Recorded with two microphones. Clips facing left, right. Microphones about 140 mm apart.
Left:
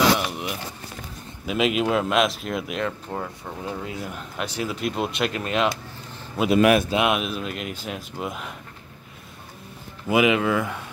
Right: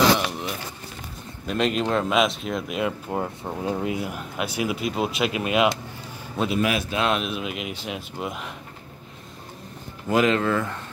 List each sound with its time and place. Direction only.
0.2 s a sound: 10° left (ahead or behind)
1.4 s speech: 5° left (ahead or behind)
3.2 s speech: 25° right (ahead or behind)
4.0 s speech: 5° right (ahead or behind)
4.8 s speech: centre (ahead or behind)
6.5 s speech: 60° left (ahead or behind)
6.9 s speech: 15° left (ahead or behind)
7.2 s speech: centre (ahead or behind)
10.0 s speech: 10° left (ahead or behind)